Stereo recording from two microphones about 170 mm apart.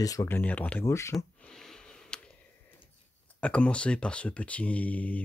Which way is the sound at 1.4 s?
5° left (ahead or behind).